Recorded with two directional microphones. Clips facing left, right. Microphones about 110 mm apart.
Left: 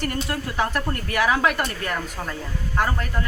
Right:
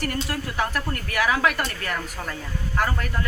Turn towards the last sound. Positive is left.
turn(degrees=25)  # may be behind; listen again after turning